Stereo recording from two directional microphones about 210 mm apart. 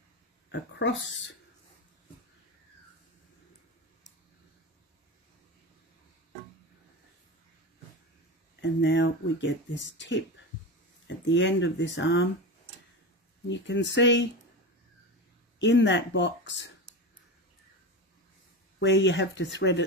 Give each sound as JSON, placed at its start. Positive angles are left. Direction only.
{"t": 0.5, "sound": "speech", "side_deg": 60}
{"t": 8.5, "sound": "speech", "side_deg": 60}
{"t": 13.5, "sound": "speech", "side_deg": 55}
{"t": 15.6, "sound": "speech", "side_deg": 60}
{"t": 18.8, "sound": "speech", "side_deg": 60}